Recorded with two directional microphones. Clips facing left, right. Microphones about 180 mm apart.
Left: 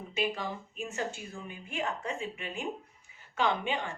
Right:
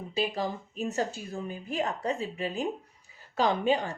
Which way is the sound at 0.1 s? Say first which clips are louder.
Right 3 dB; 35° right (ahead or behind).